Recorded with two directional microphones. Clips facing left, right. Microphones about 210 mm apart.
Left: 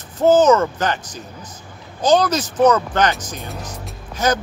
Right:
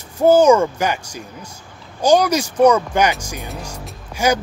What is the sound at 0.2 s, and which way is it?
Speech, 10° right (ahead or behind).